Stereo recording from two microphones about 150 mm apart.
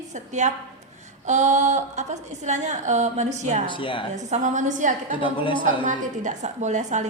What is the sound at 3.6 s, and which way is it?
Speech, 35° left (ahead or behind).